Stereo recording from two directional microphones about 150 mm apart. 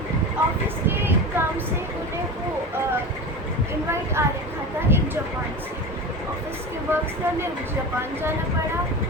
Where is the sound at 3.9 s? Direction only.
15° right (ahead or behind).